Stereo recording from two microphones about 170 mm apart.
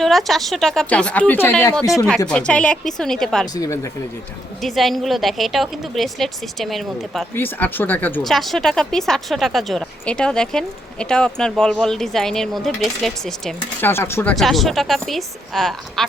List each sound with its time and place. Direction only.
0.0 s speech: centre (ahead or behind)
3.5 s speech: 20° left (ahead or behind)
4.6 s speech: centre (ahead or behind)
7.3 s speech: 10° left (ahead or behind)
13.8 s speech: 15° left (ahead or behind)
14.3 s speech: centre (ahead or behind)